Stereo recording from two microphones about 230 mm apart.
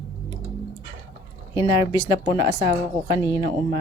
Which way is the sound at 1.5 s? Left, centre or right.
Centre.